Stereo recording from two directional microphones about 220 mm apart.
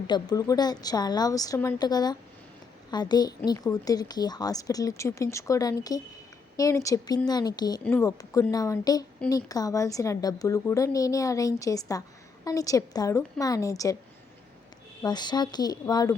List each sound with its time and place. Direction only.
0.1 s a woman's voice: 15° left (ahead or behind)
15.0 s speech: 20° left (ahead or behind)